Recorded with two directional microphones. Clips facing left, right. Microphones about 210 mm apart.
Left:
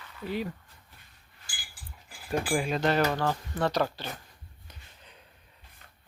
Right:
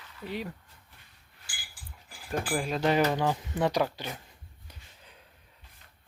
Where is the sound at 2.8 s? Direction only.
10° right (ahead or behind).